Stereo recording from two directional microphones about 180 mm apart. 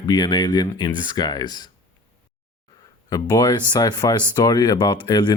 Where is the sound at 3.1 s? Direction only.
20° left (ahead or behind).